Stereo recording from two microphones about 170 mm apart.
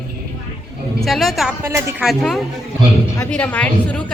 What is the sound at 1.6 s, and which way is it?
Speech, 15° right (ahead or behind).